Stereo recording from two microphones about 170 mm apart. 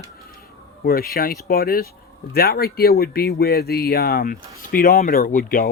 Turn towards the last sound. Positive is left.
turn(degrees=55)  # may be behind; listen again after turning